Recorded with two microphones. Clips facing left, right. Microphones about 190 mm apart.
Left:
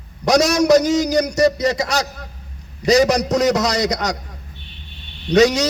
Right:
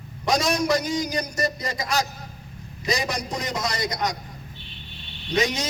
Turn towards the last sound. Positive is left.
turn(degrees=75)  # may be behind; listen again after turning